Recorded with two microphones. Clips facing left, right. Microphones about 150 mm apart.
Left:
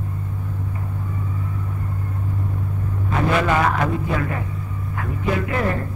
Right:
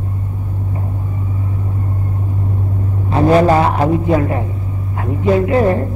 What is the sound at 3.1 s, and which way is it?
A man's voice, 35° right (ahead or behind).